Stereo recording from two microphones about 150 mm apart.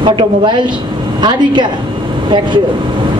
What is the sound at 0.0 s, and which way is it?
A man's voice, 30° right (ahead or behind).